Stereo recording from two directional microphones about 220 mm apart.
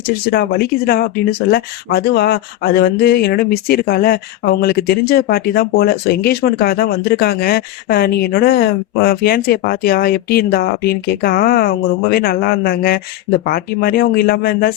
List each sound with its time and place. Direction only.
0.3 s speech: 45° left (ahead or behind)